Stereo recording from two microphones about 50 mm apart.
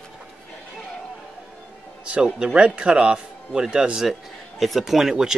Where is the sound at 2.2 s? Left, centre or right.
Centre.